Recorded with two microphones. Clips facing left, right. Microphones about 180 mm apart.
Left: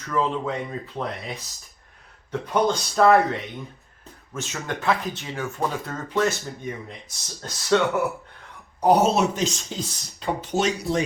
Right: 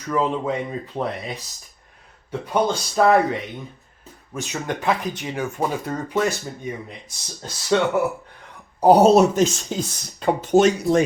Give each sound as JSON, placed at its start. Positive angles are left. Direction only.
{"t": 0.1, "sound": "speech", "side_deg": -15}
{"t": 2.5, "sound": "speech", "side_deg": -15}
{"t": 4.4, "sound": "speech", "side_deg": -15}
{"t": 8.8, "sound": "speech", "side_deg": -35}